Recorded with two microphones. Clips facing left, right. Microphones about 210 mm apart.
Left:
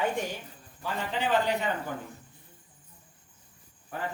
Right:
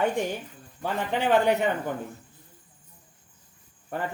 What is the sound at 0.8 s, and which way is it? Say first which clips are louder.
Speech: right 4 dB; 60° right (ahead or behind).